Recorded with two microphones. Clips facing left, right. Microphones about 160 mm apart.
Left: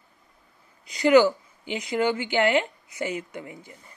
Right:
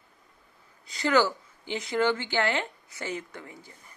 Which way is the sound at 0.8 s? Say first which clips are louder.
Left 7 dB; 15° left (ahead or behind).